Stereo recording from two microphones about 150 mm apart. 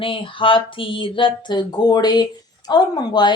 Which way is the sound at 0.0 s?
35° left (ahead or behind).